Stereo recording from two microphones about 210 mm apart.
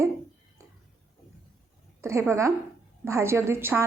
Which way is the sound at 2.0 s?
15° right (ahead or behind).